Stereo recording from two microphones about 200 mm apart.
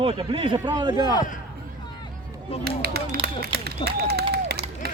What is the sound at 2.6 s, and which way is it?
Speech, 50° right (ahead or behind).